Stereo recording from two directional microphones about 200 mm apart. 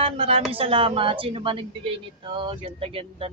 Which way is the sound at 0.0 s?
30° right (ahead or behind).